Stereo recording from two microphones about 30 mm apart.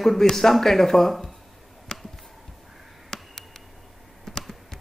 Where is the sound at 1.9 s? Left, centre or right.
Left.